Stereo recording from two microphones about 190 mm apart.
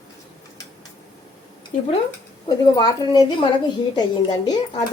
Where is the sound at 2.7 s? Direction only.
20° left (ahead or behind).